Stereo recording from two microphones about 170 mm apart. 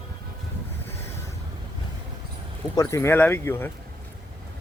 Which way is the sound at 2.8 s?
15° left (ahead or behind).